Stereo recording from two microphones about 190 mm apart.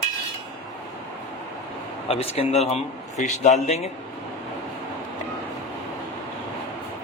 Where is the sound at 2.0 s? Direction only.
30° left (ahead or behind).